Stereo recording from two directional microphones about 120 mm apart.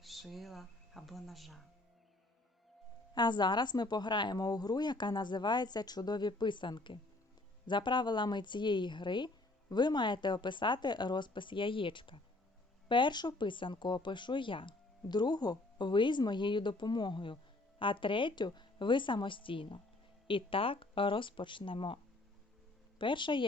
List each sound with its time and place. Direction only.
0.0 s speech: centre (ahead or behind)
3.2 s speech: 40° left (ahead or behind)
23.0 s speech: 40° left (ahead or behind)